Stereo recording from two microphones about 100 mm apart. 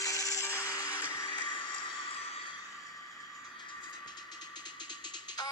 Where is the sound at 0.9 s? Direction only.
15° right (ahead or behind).